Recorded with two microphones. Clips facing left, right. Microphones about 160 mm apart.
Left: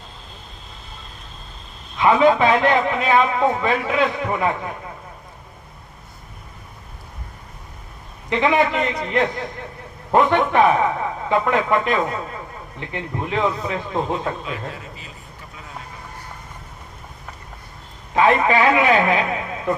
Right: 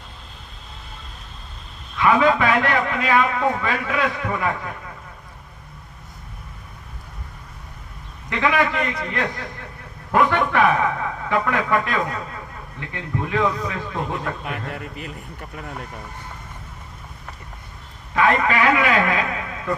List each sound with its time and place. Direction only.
2.0 s a man's voice: 20° left (ahead or behind)
8.3 s a man's voice: 20° left (ahead or behind)
14.7 s a man's voice: 60° right (ahead or behind)
18.1 s a man's voice: 20° left (ahead or behind)